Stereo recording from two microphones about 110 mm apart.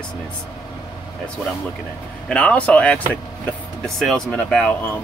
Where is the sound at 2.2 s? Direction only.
10° left (ahead or behind).